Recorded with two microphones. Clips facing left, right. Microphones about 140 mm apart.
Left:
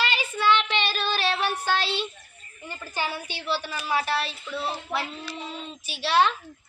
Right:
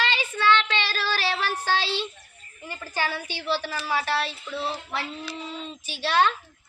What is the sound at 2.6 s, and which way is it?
A woman's voice, 20° left (ahead or behind).